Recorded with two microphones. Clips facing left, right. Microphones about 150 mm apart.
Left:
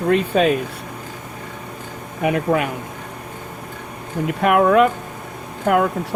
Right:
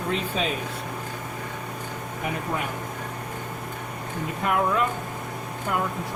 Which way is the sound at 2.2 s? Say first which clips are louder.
Left 11 dB; 80° left.